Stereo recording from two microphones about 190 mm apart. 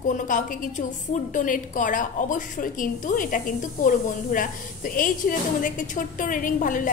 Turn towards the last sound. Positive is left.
turn(degrees=45)  # may be behind; listen again after turning